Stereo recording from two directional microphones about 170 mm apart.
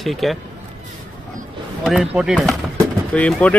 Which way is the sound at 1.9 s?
5° right (ahead or behind).